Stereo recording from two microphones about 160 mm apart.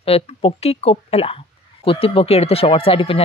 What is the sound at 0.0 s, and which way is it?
Speech, 35° left (ahead or behind).